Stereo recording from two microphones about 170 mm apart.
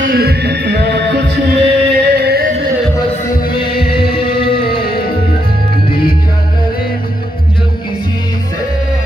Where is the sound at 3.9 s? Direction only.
30° left (ahead or behind).